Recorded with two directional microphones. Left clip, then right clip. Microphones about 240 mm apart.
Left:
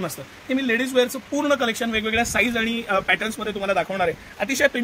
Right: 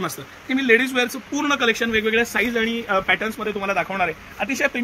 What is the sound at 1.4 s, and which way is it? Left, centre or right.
Speech, left.